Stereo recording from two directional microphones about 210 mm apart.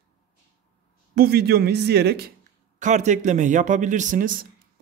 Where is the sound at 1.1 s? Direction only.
50° right (ahead or behind).